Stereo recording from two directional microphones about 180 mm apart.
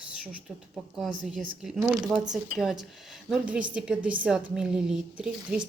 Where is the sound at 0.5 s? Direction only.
5° right (ahead or behind).